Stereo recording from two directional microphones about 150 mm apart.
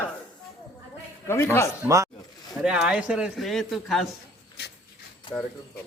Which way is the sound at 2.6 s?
5° right (ahead or behind).